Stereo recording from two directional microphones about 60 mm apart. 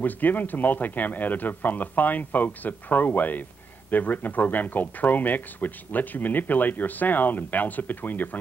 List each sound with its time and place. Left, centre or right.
0.0 s speech: left